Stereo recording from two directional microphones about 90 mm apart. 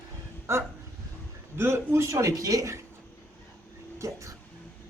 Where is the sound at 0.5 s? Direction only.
30° right (ahead or behind).